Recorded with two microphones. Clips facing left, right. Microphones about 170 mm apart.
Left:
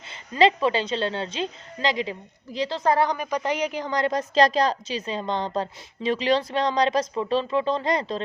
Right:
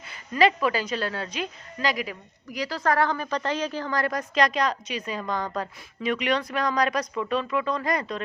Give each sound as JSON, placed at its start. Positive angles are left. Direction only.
{"t": 0.1, "sound": "a woman's voice", "side_deg": 25}